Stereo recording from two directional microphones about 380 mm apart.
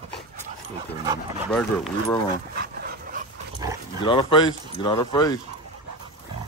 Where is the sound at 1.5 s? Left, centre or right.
Centre.